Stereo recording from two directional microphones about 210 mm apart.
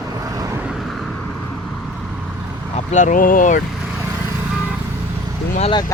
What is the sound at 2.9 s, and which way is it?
Speech, 40° left (ahead or behind).